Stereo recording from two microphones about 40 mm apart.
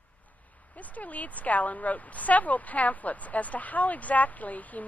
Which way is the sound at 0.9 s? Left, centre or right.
Left.